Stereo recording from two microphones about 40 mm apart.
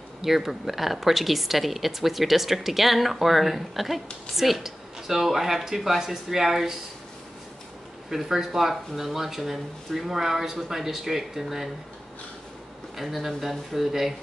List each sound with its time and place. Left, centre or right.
0.2 s a woman's voice: centre
8.1 s speech: centre
12.9 s a woman's voice: centre